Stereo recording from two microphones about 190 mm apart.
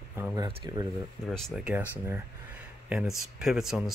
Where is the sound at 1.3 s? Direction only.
Centre (ahead or behind).